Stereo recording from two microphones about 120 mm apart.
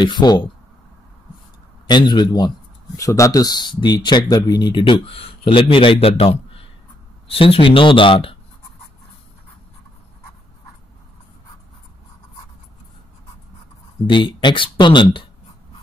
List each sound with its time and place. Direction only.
0.0 s speech: 35° left (ahead or behind)
1.9 s speech: 40° left (ahead or behind)
14.0 s speech: 40° left (ahead or behind)